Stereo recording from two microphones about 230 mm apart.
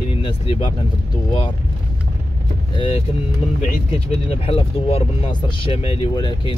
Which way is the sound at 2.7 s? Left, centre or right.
Left.